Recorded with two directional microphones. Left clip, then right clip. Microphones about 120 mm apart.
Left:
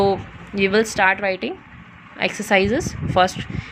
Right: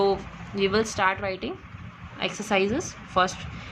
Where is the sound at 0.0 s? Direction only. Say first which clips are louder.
Left 5 dB; 40° left (ahead or behind).